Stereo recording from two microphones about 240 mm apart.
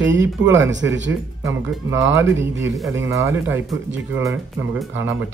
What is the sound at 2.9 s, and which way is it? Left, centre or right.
Speech, centre.